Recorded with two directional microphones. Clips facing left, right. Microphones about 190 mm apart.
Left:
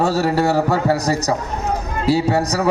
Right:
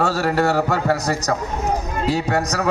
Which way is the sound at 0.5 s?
10° left (ahead or behind).